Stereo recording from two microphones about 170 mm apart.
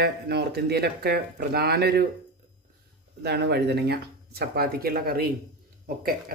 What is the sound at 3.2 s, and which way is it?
Speech, 75° right (ahead or behind).